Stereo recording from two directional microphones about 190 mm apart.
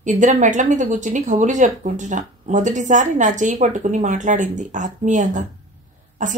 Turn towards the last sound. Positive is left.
turn(degrees=-40)  # may be behind; listen again after turning